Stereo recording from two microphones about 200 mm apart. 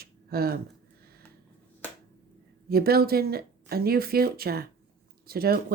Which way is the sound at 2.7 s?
50° right (ahead or behind).